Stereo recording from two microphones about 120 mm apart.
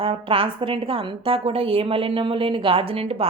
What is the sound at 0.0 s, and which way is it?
A woman's voice, 50° right (ahead or behind).